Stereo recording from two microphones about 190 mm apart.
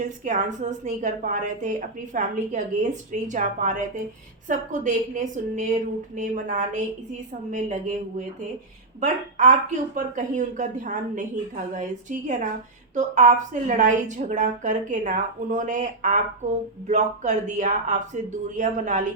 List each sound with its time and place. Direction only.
0.3 s speech: 40° right (ahead or behind)
9.0 s speech: 40° right (ahead or behind)